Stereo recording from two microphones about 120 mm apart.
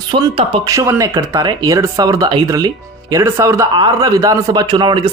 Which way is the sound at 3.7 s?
35° right (ahead or behind).